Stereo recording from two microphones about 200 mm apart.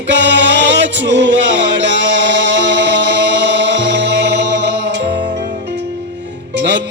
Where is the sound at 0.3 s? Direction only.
60° right (ahead or behind).